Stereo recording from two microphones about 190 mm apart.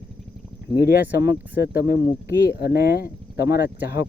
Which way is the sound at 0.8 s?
55° left (ahead or behind).